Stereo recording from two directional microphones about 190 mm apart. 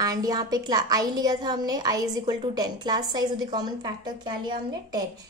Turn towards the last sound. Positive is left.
turn(degrees=-20)  # may be behind; listen again after turning